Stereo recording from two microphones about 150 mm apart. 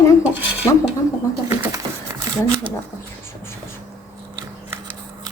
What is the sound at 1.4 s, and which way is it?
Bird, 20° right (ahead or behind).